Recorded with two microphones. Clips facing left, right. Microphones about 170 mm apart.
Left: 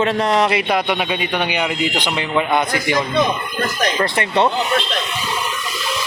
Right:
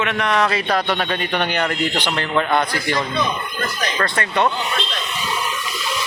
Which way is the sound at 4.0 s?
25° left (ahead or behind).